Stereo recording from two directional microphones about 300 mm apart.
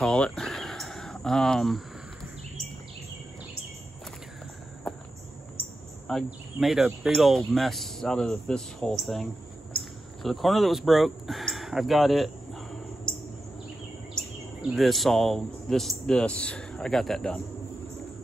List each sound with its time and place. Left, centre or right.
0.0 s a sound: centre
4.9 s cricket: centre
6.0 s speech: centre
14.6 s speech: centre